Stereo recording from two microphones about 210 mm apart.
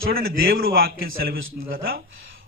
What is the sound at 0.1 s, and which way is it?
Speech, 45° right (ahead or behind).